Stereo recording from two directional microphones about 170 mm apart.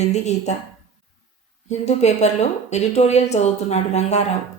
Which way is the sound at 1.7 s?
40° left (ahead or behind).